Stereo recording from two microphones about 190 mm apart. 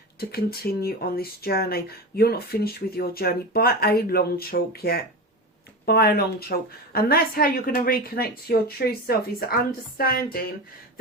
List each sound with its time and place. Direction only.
0.2 s speech: 55° left (ahead or behind)